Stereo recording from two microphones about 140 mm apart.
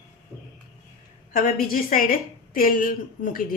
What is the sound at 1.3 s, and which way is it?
A woman's voice, 85° left.